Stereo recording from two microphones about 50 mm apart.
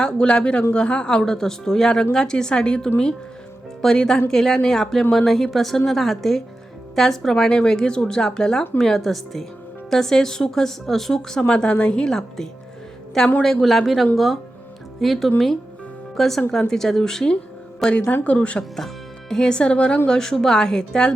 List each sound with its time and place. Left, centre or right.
0.0 s a woman's voice: centre
18.1 s speech: left
19.3 s speech: centre
20.1 s a woman's voice: centre